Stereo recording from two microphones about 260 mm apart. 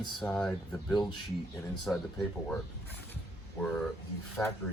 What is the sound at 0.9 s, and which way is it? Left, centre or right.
Speech, centre.